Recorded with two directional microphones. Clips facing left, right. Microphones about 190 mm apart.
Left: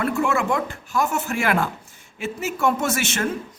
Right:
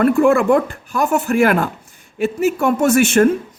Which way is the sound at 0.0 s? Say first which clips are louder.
Right 9 dB; 55° right (ahead or behind).